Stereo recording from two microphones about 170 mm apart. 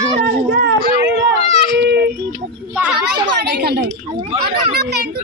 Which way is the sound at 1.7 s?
75° right (ahead or behind).